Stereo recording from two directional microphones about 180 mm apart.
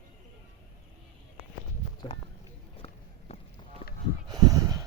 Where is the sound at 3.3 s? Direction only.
35° left (ahead or behind).